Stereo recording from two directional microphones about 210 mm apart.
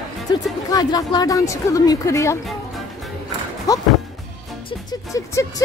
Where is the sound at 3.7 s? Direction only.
15° left (ahead or behind).